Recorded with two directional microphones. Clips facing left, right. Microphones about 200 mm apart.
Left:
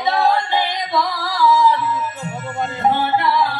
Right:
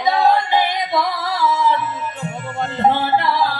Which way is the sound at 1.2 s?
25° right (ahead or behind).